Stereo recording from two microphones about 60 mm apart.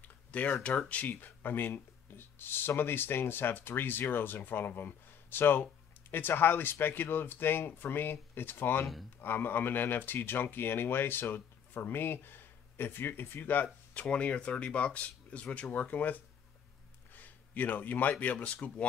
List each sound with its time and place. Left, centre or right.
0.0 s speech: left
14.0 s speech: centre
17.1 s a sound: left
18.2 s speech: left